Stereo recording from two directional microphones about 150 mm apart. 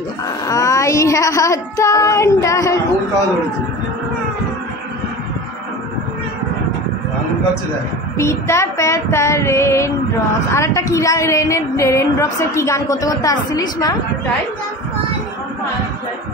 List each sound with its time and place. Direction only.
0.5 s a woman's voice: 20° left (ahead or behind)
8.2 s a woman's voice: 20° left (ahead or behind)